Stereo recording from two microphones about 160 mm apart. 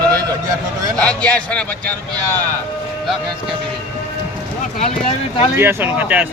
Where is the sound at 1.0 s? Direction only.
5° left (ahead or behind).